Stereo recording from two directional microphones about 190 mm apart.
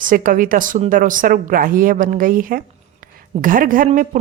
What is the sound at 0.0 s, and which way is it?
A woman's voice, 45° right (ahead or behind).